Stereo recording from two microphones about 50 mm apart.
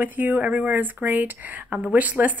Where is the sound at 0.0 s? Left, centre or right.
Right.